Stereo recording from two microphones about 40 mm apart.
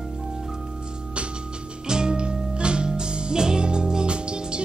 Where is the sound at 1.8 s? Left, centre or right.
Centre.